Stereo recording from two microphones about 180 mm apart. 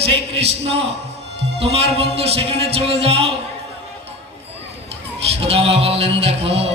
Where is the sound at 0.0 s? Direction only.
35° right (ahead or behind).